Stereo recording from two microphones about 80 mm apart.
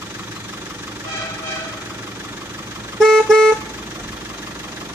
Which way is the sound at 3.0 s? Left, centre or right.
Centre.